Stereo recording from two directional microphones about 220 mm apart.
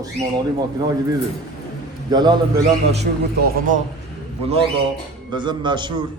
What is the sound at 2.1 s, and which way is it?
Speech, 20° right (ahead or behind).